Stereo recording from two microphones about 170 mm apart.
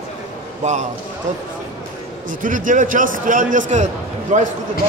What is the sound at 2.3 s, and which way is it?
A man's voice, 50° right (ahead or behind).